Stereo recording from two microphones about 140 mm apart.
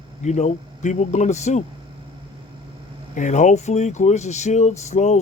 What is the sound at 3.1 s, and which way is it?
Speech, 60° left (ahead or behind).